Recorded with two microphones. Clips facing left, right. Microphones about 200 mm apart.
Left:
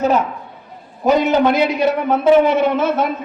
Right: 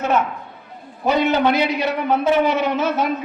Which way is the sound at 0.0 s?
35° left (ahead or behind).